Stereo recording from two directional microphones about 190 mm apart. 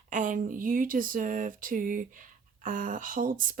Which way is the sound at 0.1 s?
45° right (ahead or behind).